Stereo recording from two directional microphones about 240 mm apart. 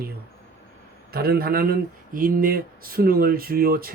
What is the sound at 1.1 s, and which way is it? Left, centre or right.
Speech, right.